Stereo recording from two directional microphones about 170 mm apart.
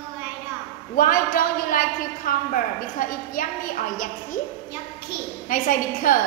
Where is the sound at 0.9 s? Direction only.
55° left (ahead or behind).